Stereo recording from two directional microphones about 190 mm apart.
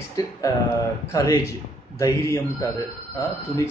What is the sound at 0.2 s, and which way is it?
Speech, 20° left (ahead or behind).